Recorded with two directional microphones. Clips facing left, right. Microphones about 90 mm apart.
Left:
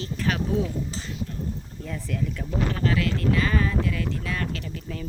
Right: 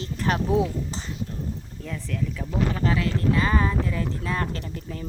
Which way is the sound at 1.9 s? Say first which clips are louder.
Even; 5° left (ahead or behind).